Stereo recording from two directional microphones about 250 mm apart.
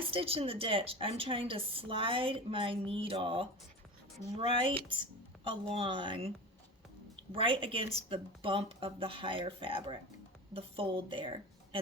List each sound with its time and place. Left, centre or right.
0.0 s speech: right
7.3 s speech: right